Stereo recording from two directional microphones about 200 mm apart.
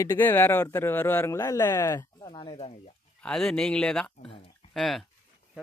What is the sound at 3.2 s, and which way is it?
Speech, 5° left (ahead or behind).